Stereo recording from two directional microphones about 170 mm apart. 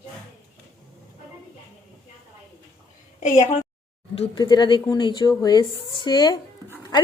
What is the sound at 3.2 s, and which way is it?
Speech, 45° left (ahead or behind).